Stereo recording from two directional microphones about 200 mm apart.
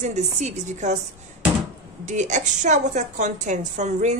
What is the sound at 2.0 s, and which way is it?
Speech, 35° right (ahead or behind).